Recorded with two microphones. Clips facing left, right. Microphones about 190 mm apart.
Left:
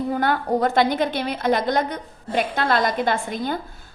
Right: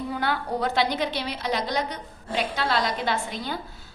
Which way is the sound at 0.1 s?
50° left (ahead or behind).